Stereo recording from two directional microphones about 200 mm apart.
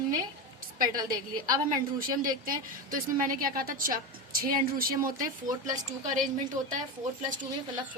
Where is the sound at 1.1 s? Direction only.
45° right (ahead or behind).